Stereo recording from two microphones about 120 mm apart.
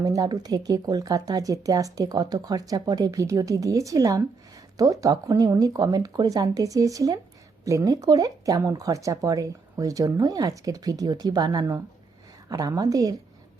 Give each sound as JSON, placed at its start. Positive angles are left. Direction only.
{"t": 0.0, "sound": "speech", "side_deg": -30}